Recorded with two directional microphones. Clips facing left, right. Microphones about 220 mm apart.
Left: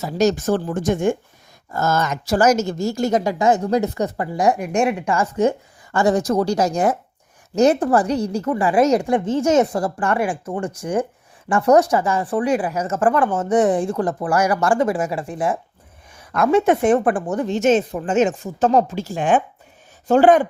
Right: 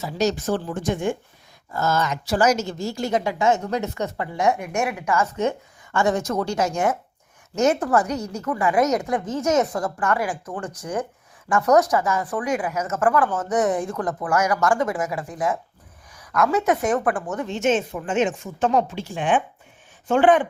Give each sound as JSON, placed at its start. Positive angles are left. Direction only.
{"t": 0.0, "sound": "a woman's voice", "side_deg": 45}